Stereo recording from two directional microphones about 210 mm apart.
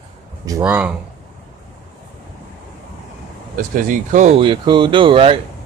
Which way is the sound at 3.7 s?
40° right (ahead or behind).